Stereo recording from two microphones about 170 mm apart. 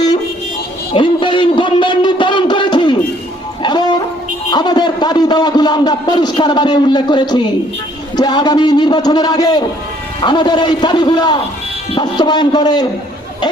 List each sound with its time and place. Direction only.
0.9 s a sound: 30° left (ahead or behind)
3.6 s music: 25° left (ahead or behind)
4.5 s a man's voice: 25° left (ahead or behind)